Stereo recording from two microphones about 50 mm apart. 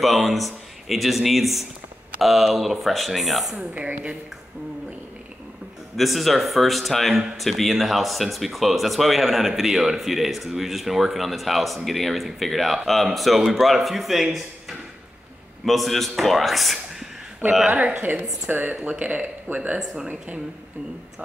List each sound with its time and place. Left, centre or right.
0.0 s speech: centre
3.5 s speech: right
5.9 s a man's voice: centre
18.5 s a woman's voice: right